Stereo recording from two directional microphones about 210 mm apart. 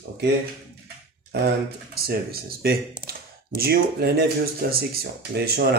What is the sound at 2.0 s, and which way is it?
Speech, 45° right (ahead or behind).